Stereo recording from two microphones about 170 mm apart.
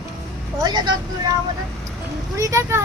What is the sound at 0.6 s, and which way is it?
Speech, 25° right (ahead or behind).